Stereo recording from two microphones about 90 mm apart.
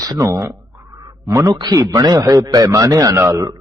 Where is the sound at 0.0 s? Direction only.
40° right (ahead or behind).